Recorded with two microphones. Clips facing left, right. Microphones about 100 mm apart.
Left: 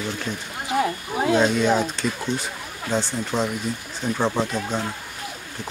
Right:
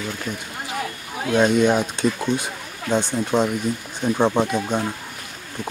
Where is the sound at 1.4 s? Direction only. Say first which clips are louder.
Right 2 dB; 15° right (ahead or behind).